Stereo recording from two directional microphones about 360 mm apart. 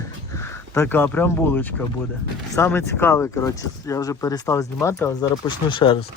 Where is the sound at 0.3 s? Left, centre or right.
Centre.